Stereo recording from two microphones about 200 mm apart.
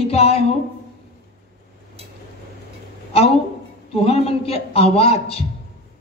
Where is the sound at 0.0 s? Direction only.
30° left (ahead or behind).